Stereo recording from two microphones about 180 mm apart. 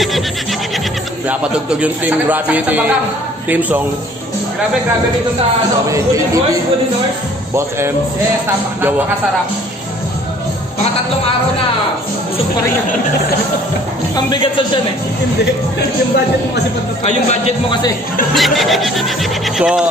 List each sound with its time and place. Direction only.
1.3 s a man's voice: 5° right (ahead or behind)
5.9 s a man's voice: 20° right (ahead or behind)
14.1 s speech: 25° left (ahead or behind)
18.3 s snicker: centre (ahead or behind)